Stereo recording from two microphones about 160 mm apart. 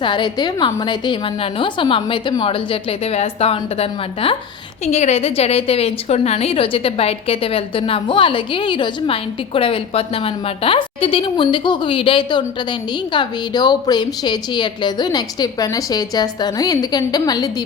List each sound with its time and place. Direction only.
0.0 s a woman's voice: 30° left (ahead or behind)